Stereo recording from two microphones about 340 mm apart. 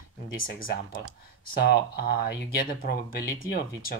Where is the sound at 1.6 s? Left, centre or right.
Left.